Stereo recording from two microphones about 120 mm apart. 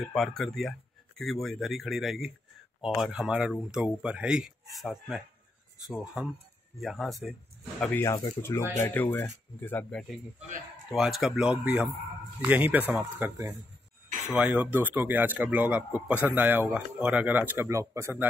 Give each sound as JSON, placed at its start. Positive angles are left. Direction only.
{"t": 0.0, "sound": "speech", "side_deg": 0}
{"t": 7.9, "sound": "speech", "side_deg": 25}
{"t": 14.3, "sound": "speech", "side_deg": -10}